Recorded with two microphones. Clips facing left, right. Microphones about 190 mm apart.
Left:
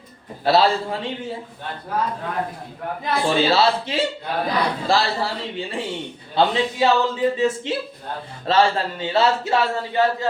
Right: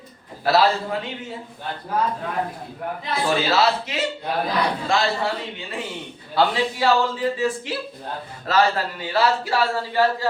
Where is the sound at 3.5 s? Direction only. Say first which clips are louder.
Left 2 dB; 30° left (ahead or behind).